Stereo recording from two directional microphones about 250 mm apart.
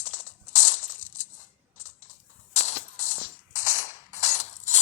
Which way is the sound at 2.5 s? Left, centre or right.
Left.